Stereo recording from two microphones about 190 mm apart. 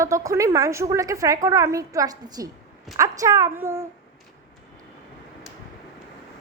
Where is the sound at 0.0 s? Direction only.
15° right (ahead or behind).